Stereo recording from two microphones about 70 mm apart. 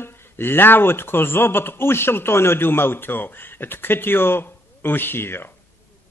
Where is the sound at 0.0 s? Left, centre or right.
Left.